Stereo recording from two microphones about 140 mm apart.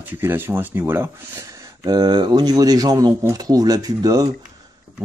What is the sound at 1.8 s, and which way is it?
Speech, 30° right (ahead or behind).